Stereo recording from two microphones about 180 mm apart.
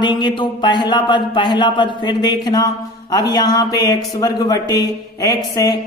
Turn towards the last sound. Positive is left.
turn(degrees=20)  # may be behind; listen again after turning